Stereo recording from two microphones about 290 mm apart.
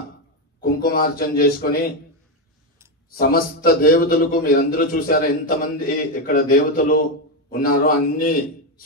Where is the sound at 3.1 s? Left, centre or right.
Left.